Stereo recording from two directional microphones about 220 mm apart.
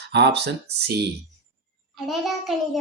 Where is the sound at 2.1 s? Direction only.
Centre (ahead or behind).